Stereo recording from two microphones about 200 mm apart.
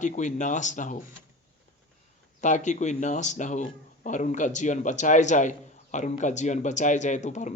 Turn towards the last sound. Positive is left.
turn(degrees=35)  # may be behind; listen again after turning